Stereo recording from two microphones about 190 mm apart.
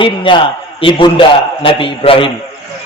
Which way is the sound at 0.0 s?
25° left (ahead or behind).